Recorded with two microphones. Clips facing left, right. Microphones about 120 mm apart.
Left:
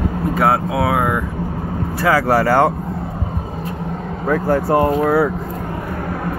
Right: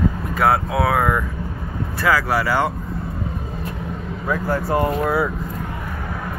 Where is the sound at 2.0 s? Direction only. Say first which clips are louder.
Left 4 dB; 30° left (ahead or behind); by 2.7 s 50° left (ahead or behind).